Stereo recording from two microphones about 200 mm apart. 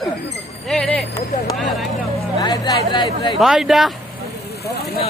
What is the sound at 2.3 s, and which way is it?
Chatter, 20° left (ahead or behind).